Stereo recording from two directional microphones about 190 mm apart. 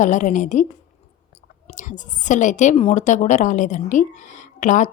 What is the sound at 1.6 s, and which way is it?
A woman's voice, 40° left (ahead or behind).